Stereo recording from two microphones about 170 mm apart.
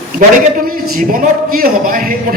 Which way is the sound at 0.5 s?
55° right (ahead or behind).